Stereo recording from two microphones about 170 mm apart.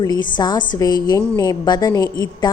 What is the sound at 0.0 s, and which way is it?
A woman's voice, 25° left (ahead or behind).